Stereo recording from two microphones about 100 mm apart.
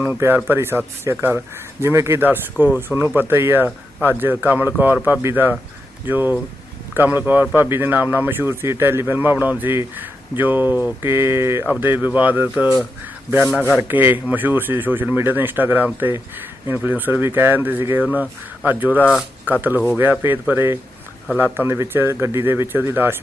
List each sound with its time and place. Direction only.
0.0 s a man's voice: 20° right (ahead or behind)
11.7 s speech: 15° right (ahead or behind)
13.5 s a man's voice: 10° left (ahead or behind)
13.7 s a man's voice: 20° right (ahead or behind)